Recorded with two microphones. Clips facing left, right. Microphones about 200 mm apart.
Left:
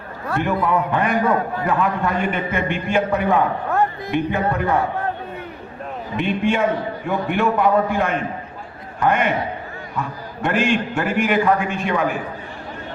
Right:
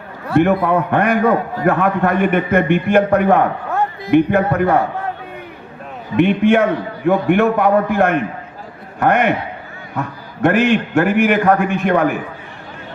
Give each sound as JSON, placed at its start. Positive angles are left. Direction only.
{"t": 0.3, "sound": "a man's voice", "side_deg": -65}
{"t": 6.1, "sound": "a man's voice", "side_deg": -60}